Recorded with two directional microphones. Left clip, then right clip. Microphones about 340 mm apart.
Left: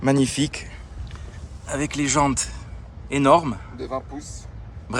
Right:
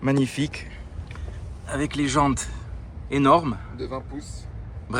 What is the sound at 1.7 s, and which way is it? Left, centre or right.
Speech, centre.